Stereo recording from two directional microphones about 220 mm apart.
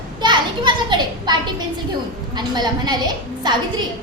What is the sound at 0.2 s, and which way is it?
Children playing, 20° right (ahead or behind).